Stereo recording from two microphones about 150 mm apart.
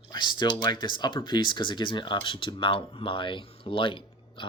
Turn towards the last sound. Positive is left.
turn(degrees=35)  # may be behind; listen again after turning